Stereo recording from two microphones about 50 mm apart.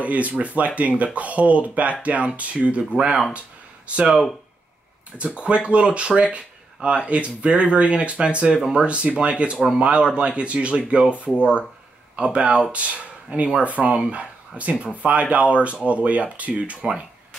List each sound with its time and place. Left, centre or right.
0.0 s speech: right
3.3 s a sound: right
5.4 s speech: right